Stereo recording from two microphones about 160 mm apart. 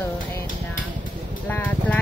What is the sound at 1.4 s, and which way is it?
Speech, 10° left (ahead or behind).